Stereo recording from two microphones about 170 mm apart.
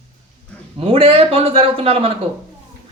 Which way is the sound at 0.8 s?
35° right (ahead or behind).